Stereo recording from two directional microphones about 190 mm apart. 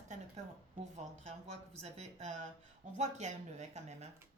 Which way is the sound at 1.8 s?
35° right (ahead or behind).